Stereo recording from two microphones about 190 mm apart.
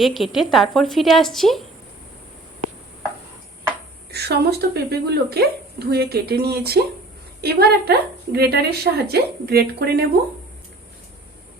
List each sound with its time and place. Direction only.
0.0 s speech: centre (ahead or behind)
4.1 s a woman's voice: 55° right (ahead or behind)